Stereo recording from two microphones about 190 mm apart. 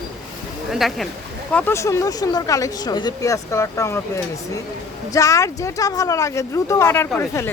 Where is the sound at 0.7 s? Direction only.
Centre (ahead or behind).